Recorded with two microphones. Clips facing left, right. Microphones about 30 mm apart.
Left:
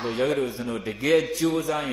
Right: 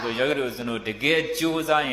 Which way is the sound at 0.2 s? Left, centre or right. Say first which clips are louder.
Even; right.